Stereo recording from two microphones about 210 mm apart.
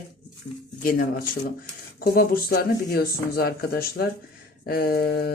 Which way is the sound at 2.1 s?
45° left (ahead or behind).